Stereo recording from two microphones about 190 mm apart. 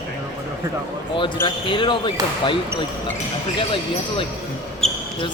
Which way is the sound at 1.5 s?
25° left (ahead or behind).